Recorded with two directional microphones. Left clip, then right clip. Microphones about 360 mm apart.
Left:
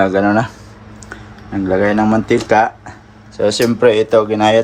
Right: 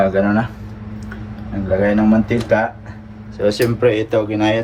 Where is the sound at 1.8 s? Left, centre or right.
Centre.